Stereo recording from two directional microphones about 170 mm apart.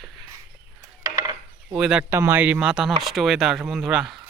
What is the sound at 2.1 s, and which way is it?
Speech, 15° right (ahead or behind).